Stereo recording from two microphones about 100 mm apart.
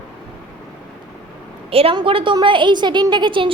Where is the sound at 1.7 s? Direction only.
70° right (ahead or behind).